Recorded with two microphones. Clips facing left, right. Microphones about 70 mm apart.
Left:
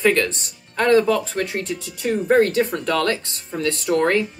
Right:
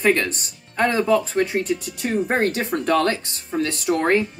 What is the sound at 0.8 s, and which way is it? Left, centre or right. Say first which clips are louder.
Speech: left 2 dB; centre.